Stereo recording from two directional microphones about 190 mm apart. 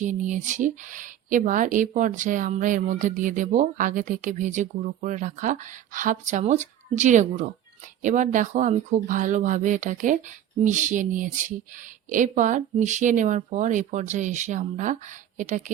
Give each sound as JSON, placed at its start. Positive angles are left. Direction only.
{"t": 0.0, "sound": "speech", "side_deg": -40}